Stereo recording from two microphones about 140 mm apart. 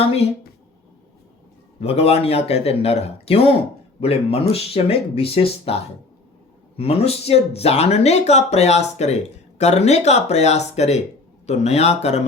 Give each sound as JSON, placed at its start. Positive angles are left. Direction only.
{"t": 0.0, "sound": "speech", "side_deg": 45}
{"t": 1.8, "sound": "speech", "side_deg": 45}